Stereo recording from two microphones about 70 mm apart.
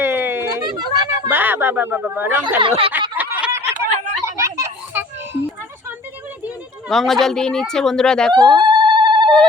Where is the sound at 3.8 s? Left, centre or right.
Right.